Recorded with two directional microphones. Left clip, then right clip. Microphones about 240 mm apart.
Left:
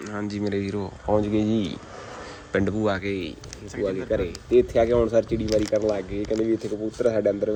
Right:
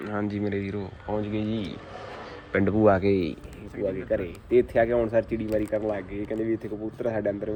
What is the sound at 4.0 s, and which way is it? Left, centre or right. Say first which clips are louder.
Speech: left 2 dB; centre.